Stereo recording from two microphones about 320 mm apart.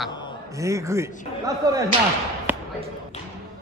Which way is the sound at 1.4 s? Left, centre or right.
Centre.